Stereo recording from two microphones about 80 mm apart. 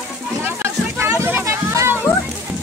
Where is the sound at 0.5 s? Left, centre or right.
Right.